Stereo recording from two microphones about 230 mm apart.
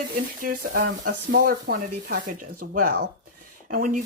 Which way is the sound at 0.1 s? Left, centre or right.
Right.